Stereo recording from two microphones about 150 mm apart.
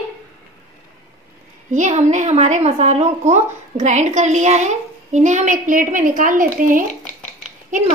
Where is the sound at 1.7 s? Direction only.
55° right (ahead or behind).